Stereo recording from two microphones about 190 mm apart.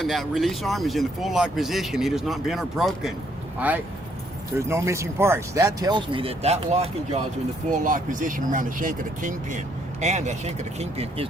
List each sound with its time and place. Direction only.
0.0 s speech: centre (ahead or behind); by 11.3 s 35° right (ahead or behind)